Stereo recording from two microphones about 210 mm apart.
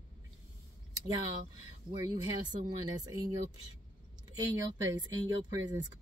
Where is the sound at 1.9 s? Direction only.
20° right (ahead or behind).